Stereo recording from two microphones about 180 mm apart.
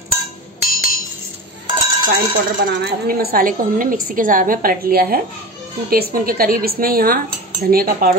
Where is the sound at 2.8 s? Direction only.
55° right (ahead or behind).